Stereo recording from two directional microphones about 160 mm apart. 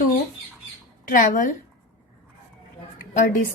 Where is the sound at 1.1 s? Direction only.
60° left (ahead or behind).